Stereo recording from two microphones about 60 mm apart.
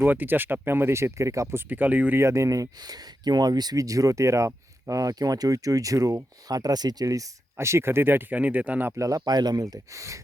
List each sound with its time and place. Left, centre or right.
0.0 s speech: right
1.5 s speech: right
2.1 s speech: right
7.6 s speech: right
9.0 s speech: right